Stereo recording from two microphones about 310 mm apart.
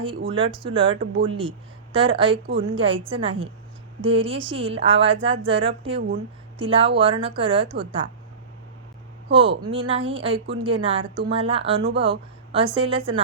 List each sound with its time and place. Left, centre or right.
0.3 s speech: centre
9.3 s speech: centre